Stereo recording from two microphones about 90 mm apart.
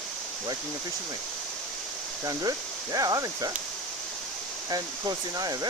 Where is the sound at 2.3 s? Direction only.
40° right (ahead or behind).